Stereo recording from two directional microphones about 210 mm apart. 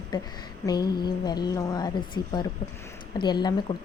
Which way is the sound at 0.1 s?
20° left (ahead or behind).